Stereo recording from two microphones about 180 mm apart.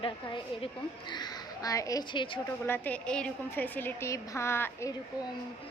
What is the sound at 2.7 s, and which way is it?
A woman's voice, 10° left (ahead or behind).